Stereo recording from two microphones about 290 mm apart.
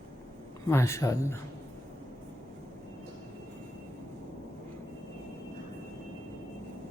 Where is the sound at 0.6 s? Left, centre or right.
Centre.